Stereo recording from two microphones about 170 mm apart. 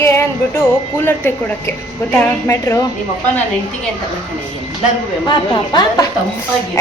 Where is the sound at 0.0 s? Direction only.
15° left (ahead or behind).